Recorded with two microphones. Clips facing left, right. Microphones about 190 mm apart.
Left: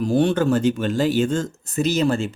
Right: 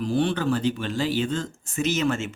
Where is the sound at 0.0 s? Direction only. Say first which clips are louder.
Left 5 dB; 45° left (ahead or behind).